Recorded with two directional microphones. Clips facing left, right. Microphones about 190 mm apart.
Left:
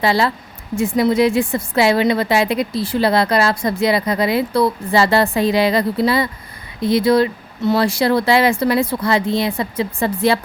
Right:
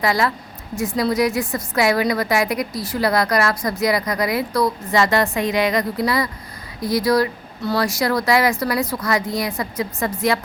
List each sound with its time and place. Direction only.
0.0 s a woman's voice: 30° left (ahead or behind)